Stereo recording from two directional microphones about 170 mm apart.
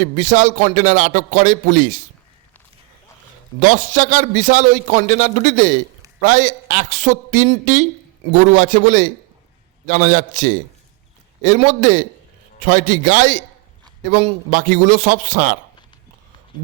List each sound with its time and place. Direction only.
0.0 s a man's voice: 45° right (ahead or behind)
3.6 s a man's voice: 50° right (ahead or behind)